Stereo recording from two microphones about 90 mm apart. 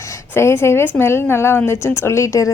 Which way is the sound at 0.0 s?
30° left (ahead or behind).